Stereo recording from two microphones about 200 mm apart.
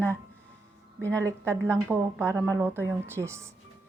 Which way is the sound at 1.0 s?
15° right (ahead or behind).